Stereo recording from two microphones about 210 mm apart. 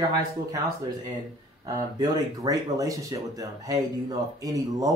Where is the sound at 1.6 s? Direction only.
15° right (ahead or behind).